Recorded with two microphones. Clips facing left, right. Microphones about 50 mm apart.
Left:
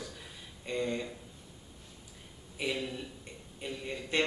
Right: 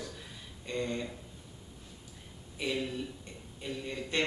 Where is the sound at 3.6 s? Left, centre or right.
Centre.